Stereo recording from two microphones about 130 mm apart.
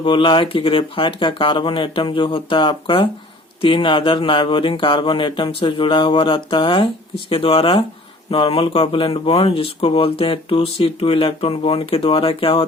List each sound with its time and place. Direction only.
0.0 s speech: 40° left (ahead or behind)